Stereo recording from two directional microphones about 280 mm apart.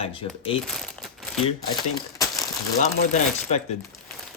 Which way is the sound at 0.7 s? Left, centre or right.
Centre.